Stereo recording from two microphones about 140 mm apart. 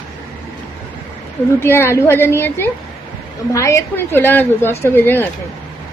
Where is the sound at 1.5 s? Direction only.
15° left (ahead or behind).